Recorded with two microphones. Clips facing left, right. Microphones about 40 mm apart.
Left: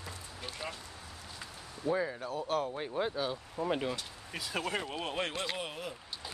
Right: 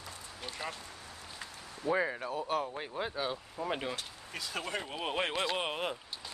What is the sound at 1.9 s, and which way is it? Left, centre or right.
Speech, right.